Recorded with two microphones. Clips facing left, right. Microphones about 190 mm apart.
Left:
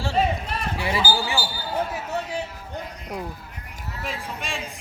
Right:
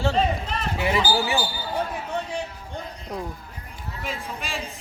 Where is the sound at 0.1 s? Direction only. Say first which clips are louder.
Even; 10° left (ahead or behind).